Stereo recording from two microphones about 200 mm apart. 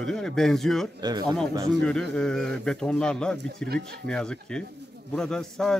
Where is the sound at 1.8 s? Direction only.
5° left (ahead or behind).